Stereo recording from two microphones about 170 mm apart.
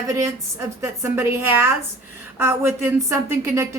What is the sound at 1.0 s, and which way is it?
Speech, 15° right (ahead or behind).